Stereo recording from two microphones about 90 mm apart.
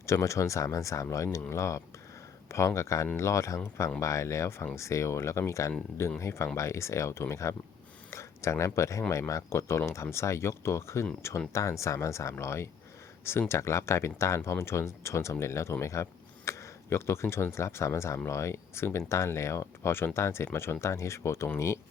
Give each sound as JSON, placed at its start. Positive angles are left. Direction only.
{"t": 0.0, "sound": "speech", "side_deg": 35}